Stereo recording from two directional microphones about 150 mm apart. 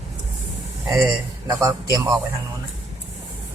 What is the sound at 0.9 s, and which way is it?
Speech, 20° right (ahead or behind).